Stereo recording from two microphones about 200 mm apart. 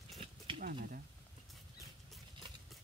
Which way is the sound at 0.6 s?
45° right (ahead or behind).